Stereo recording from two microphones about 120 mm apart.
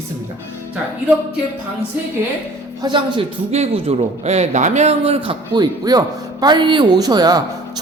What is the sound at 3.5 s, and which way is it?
A man's voice, 60° right (ahead or behind).